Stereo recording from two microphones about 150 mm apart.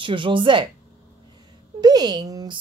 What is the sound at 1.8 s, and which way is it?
Speech, 25° right (ahead or behind).